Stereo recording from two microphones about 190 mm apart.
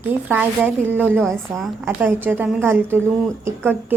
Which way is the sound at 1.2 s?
Centre (ahead or behind).